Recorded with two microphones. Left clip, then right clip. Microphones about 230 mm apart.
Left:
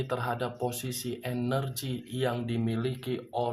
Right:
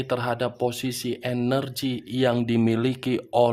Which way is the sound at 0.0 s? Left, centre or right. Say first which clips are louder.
Right 6 dB; right.